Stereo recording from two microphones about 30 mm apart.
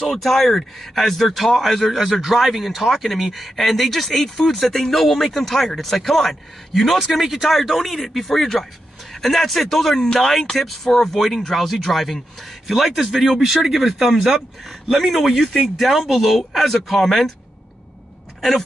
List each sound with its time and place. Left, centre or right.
0.0 s speech: centre
8.3 s speech: centre
9.9 s speech: left
10.2 s speech: centre
14.7 s a man's voice: centre